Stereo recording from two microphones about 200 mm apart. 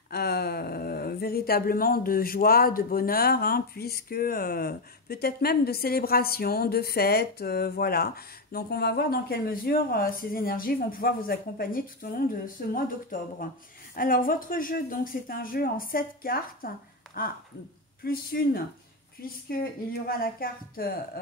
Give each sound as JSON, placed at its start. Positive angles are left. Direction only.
{"t": 0.1, "sound": "speech", "side_deg": 50}
{"t": 19.9, "sound": "speech", "side_deg": 45}